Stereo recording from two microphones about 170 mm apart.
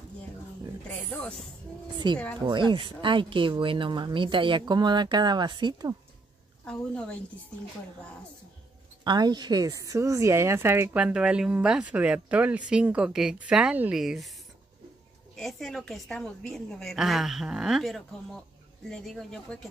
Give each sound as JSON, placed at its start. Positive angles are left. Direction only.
{"t": 0.8, "sound": "speech", "side_deg": 10}
{"t": 2.0, "sound": "speech", "side_deg": -25}
{"t": 6.6, "sound": "a woman's voice", "side_deg": 5}
{"t": 9.0, "sound": "speech", "side_deg": -25}
{"t": 15.3, "sound": "a woman's voice", "side_deg": 0}